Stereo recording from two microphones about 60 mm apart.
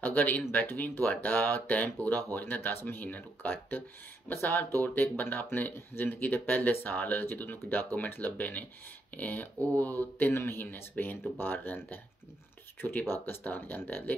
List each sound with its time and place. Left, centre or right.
0.0 s speech: left
4.3 s speech: left
4.8 s speech: left
13.2 s speech: left